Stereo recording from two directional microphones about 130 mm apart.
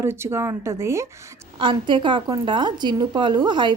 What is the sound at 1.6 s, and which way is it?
A woman's voice, 40° right (ahead or behind).